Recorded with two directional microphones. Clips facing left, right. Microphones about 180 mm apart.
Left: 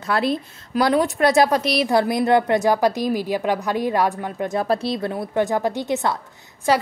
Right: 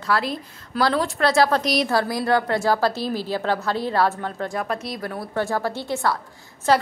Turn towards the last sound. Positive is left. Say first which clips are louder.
# even
turn(degrees=10)  # may be behind; listen again after turning